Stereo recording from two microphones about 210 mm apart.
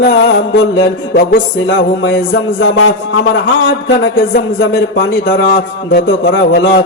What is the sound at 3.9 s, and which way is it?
Speech, 60° left (ahead or behind).